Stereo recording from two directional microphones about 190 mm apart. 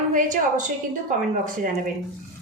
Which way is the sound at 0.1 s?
45° right (ahead or behind).